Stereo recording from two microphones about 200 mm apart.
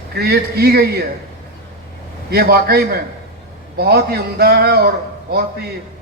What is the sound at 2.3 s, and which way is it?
A man's voice, 50° right (ahead or behind).